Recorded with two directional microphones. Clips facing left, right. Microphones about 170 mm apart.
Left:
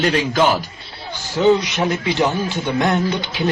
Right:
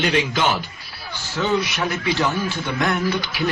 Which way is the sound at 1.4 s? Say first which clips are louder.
Left 6 dB; 20° left (ahead or behind).